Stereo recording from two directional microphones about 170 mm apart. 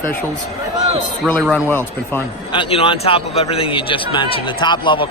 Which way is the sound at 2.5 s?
30° left (ahead or behind).